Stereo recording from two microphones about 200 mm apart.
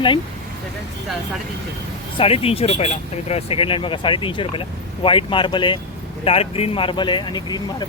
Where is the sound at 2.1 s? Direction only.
30° left (ahead or behind).